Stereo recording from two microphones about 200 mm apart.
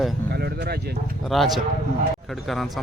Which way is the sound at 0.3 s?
55° right (ahead or behind).